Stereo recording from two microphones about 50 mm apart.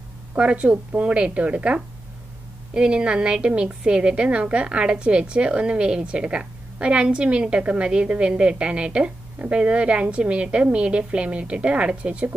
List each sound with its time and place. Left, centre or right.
0.4 s a woman's voice: right